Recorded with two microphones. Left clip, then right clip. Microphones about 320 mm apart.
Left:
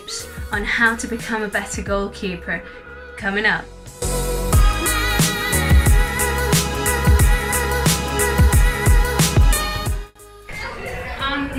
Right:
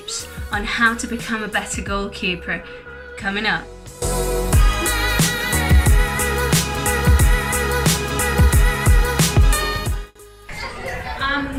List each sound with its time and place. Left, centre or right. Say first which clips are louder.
0.5 s a woman's voice: left 1 dB; centre
3.2 s a woman's voice: left 2 dB; centre
4.0 s music: right 2 dB; centre